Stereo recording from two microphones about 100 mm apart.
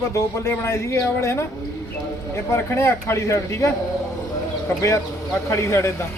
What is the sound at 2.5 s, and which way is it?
A man's voice, 30° left (ahead or behind).